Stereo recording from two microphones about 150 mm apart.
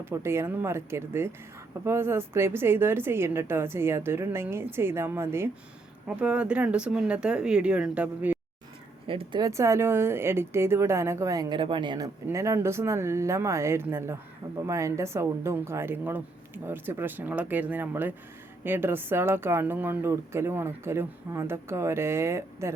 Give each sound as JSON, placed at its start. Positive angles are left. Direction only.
{"t": 0.0, "sound": "speech", "side_deg": -15}
{"t": 9.0, "sound": "speech", "side_deg": -35}
{"t": 9.4, "sound": "a woman's voice", "side_deg": -20}